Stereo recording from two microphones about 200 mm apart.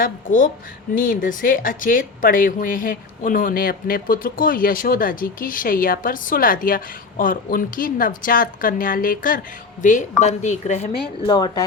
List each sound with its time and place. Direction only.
0.0 s speech: 40° left (ahead or behind)
11.3 s speech: 20° left (ahead or behind)